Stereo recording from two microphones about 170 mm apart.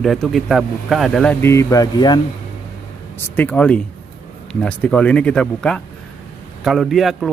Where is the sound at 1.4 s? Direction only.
20° left (ahead or behind).